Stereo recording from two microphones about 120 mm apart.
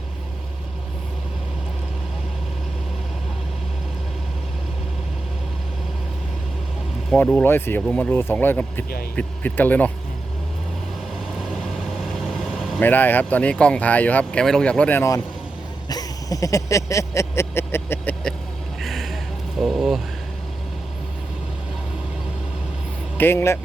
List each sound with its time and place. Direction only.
7.1 s speech: 5° left (ahead or behind)
7.4 s speech: 20° left (ahead or behind)
11.3 s vehicle: centre (ahead or behind)
12.8 s speech: 15° left (ahead or behind)
15.9 s a sound: 30° left (ahead or behind)
18.8 s a sound: centre (ahead or behind)
19.5 s speech: centre (ahead or behind)
23.1 s speech: 20° left (ahead or behind)